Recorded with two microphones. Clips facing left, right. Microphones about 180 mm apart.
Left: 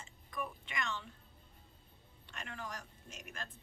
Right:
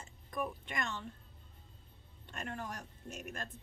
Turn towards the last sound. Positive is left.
turn(degrees=-45)  # may be behind; listen again after turning